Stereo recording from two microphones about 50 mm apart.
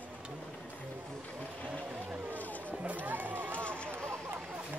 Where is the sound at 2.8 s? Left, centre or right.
Right.